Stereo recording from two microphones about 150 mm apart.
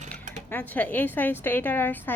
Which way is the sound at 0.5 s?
10° left (ahead or behind).